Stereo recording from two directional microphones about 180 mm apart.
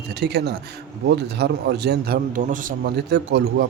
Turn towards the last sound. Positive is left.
turn(degrees=-70)  # may be behind; listen again after turning